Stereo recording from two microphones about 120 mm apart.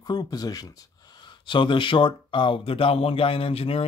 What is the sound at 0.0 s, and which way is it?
Speech, 35° left (ahead or behind).